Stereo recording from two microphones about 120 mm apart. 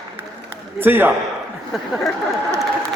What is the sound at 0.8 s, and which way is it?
Speech, 15° right (ahead or behind).